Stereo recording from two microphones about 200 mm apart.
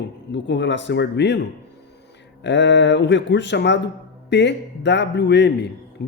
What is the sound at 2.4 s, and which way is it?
A man's voice, 65° left (ahead or behind).